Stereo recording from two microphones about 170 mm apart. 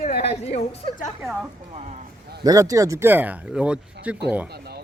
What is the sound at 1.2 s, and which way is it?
Speech, 5° right (ahead or behind).